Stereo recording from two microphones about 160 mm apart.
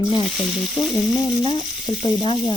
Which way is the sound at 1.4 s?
30° left (ahead or behind).